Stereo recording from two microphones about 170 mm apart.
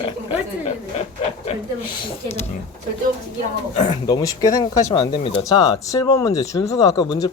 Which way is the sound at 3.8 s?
25° left (ahead or behind).